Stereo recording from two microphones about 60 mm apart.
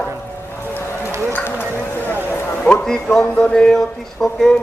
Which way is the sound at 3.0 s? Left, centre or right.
Centre.